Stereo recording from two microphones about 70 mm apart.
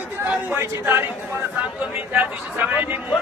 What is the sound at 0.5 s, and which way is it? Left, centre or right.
Speech, right.